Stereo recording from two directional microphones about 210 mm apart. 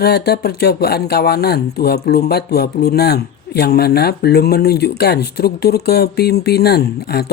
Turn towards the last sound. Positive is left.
turn(degrees=50)  # may be behind; listen again after turning